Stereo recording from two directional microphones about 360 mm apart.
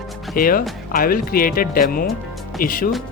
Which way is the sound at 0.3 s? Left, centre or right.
Left.